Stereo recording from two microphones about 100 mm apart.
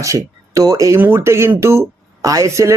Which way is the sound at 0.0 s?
35° right (ahead or behind).